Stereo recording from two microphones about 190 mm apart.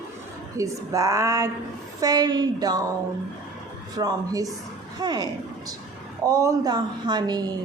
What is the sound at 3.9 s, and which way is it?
A woman's voice, 20° right (ahead or behind).